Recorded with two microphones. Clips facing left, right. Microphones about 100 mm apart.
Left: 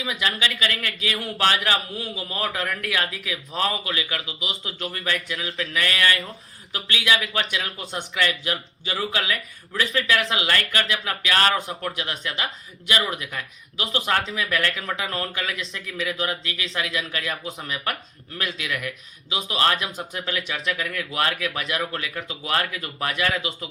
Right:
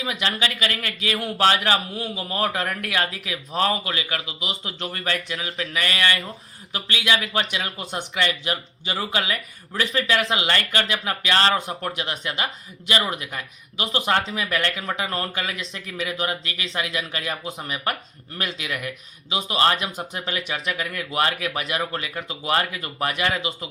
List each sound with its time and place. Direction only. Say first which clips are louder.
0.0 s speech: right 1 dB; 30° right (ahead or behind)
5.7 s speech: even; 20° right (ahead or behind)